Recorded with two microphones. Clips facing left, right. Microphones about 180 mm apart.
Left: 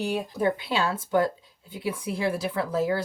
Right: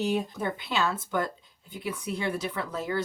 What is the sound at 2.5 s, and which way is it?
Speech, 30° left (ahead or behind).